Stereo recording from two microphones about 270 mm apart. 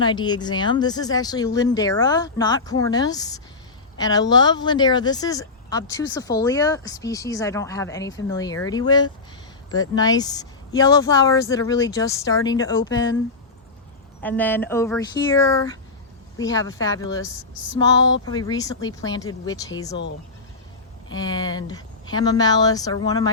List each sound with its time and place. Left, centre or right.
0.0 s speech: centre
14.2 s speech: centre
21.1 s speech: centre